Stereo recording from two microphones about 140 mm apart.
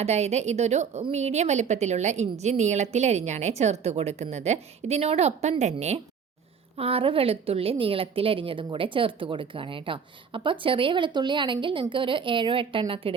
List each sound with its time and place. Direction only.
0.0 s a woman's voice: 50° right (ahead or behind)
6.7 s a woman's voice: 45° right (ahead or behind)